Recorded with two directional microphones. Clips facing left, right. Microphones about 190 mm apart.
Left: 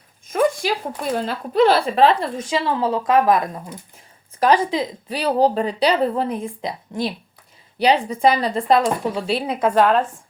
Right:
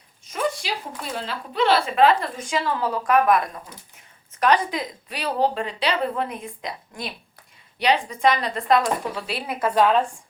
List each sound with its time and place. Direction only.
0.3 s a sound: 50° left (ahead or behind)
1.1 s speech: 45° left (ahead or behind); by 9.6 s 25° left (ahead or behind)
9.8 s a woman's voice: 5° left (ahead or behind)